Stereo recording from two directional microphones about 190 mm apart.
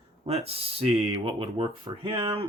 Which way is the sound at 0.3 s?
30° right (ahead or behind).